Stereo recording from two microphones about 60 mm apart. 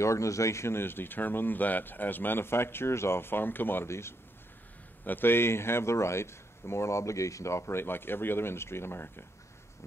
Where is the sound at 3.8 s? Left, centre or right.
Left.